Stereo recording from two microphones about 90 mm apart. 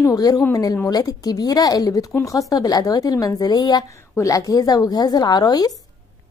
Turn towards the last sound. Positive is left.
turn(degrees=45)  # may be behind; listen again after turning